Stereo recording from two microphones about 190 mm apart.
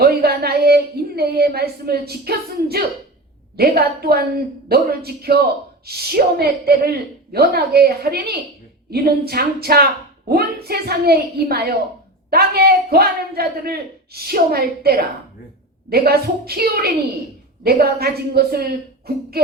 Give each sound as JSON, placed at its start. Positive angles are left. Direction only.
{"t": 0.0, "sound": "a woman's voice", "side_deg": -55}